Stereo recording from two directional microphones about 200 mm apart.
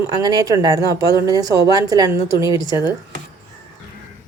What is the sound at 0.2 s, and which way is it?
A woman's voice, 20° right (ahead or behind).